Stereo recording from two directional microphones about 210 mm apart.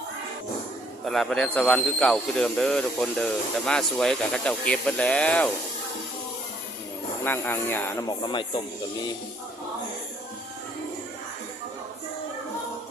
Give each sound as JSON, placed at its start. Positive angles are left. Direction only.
{"t": 1.0, "sound": "speech", "side_deg": 0}
{"t": 7.3, "sound": "speech", "side_deg": 10}